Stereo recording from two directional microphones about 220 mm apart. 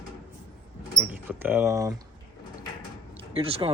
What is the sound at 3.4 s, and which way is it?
Speech, 25° right (ahead or behind).